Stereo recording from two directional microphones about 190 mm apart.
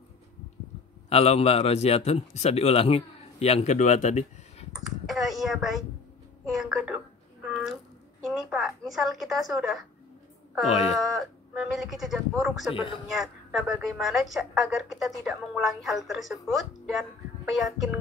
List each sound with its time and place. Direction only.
1.1 s a man's voice: 35° left (ahead or behind)
4.7 s a woman's voice: centre (ahead or behind)
11.0 s a woman's voice: centre (ahead or behind)
12.7 s speech: 25° left (ahead or behind)
13.1 s a woman's voice: centre (ahead or behind)